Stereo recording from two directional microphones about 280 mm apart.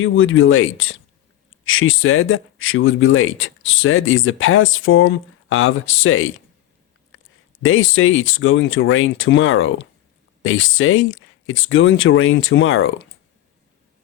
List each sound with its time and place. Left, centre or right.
0.0 s speech: left
7.6 s speech: left